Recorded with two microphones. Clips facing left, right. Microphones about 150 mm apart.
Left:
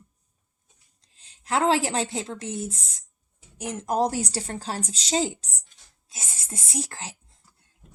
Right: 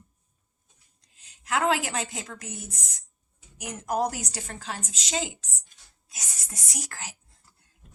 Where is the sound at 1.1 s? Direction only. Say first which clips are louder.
Left 3 dB; 30° left (ahead or behind).